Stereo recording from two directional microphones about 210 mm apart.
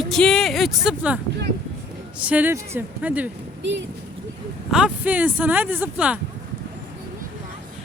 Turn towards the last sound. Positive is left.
turn(degrees=-5)  # may be behind; listen again after turning